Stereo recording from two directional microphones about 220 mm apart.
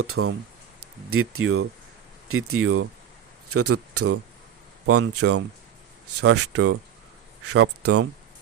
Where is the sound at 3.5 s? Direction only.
90° right.